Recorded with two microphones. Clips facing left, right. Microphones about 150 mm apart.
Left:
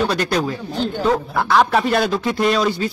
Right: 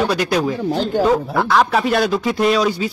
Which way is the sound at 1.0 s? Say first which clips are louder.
Right 2 dB; centre (ahead or behind).